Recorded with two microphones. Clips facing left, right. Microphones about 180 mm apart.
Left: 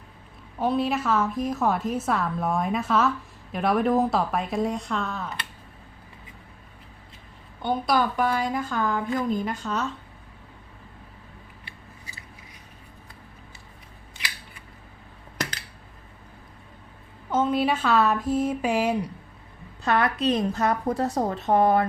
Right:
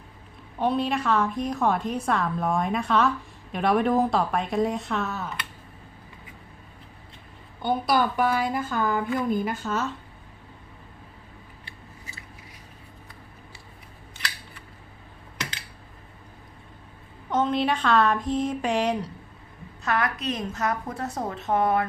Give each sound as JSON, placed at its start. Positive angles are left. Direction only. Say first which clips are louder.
{"t": 0.6, "sound": "a woman's voice", "louder": "even", "side_deg": 0}
{"t": 7.6, "sound": "a woman's voice", "louder": "even", "side_deg": 0}
{"t": 17.3, "sound": "a woman's voice", "louder": "left 1 dB", "side_deg": 5}
{"t": 19.8, "sound": "a woman's voice", "louder": "left 4 dB", "side_deg": 30}